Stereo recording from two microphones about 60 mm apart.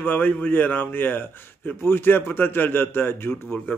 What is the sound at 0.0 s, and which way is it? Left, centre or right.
Speech, left.